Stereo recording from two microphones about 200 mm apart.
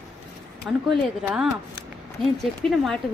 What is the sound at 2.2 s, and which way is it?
Speech, centre (ahead or behind).